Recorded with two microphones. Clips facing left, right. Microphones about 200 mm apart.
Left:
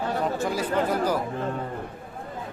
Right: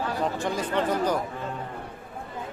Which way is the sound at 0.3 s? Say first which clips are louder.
Left 2 dB; 5° left (ahead or behind).